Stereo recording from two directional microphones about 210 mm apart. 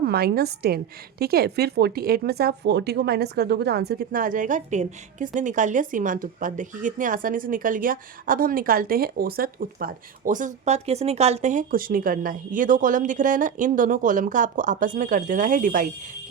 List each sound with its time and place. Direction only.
0.0 s a woman's voice: 50° right (ahead or behind)